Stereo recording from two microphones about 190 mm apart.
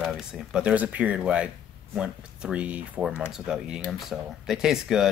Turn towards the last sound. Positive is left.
turn(degrees=-5)  # may be behind; listen again after turning